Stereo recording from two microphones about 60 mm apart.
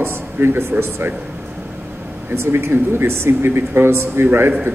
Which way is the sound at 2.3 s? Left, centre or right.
Right.